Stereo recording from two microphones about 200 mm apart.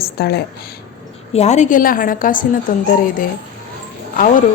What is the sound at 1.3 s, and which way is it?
A woman's voice, 35° left (ahead or behind).